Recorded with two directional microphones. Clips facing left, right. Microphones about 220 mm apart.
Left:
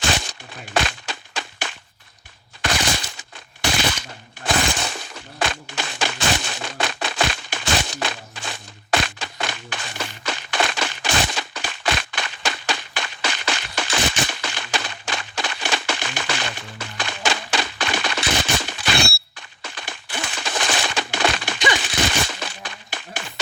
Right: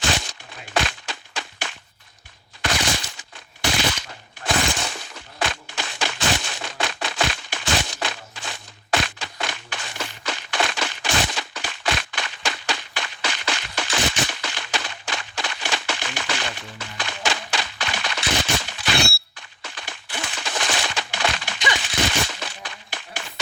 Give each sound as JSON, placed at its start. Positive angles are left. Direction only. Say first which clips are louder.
{"t": 0.0, "sound": "crushing", "louder": "left 1 dB", "side_deg": 50}
{"t": 2.6, "sound": "machine gun", "louder": "left 1 dB", "side_deg": 50}
{"t": 4.4, "sound": "breaking", "louder": "left 1 dB", "side_deg": 50}
{"t": 10.2, "sound": "a sound", "louder": "left 2 dB", "side_deg": 50}